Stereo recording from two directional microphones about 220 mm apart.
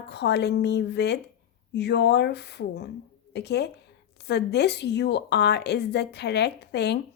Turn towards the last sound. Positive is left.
turn(degrees=50)  # may be behind; listen again after turning